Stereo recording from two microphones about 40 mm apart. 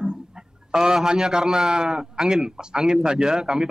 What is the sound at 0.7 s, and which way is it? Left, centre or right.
Speech, centre.